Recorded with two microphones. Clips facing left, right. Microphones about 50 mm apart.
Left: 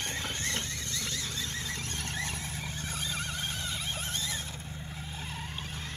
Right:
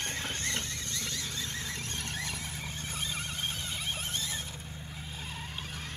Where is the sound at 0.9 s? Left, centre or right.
Right.